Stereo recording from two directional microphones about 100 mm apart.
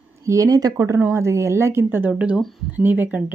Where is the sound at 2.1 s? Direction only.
10° right (ahead or behind).